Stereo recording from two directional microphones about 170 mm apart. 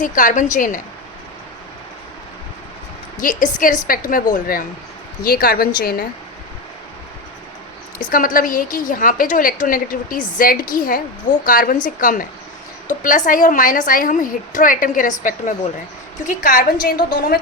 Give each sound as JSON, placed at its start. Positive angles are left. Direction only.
{"t": 0.0, "sound": "a woman's voice", "side_deg": 50}
{"t": 3.2, "sound": "a woman's voice", "side_deg": 50}
{"t": 7.9, "sound": "a woman's voice", "side_deg": 55}